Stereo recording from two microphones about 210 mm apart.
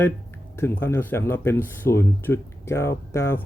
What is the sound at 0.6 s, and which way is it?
Speech, 10° left (ahead or behind).